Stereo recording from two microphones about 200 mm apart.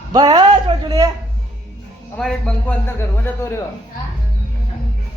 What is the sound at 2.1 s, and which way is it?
Speech, 5° left (ahead or behind).